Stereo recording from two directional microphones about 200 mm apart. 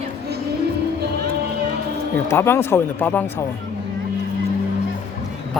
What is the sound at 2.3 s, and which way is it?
Speech, 10° left (ahead or behind).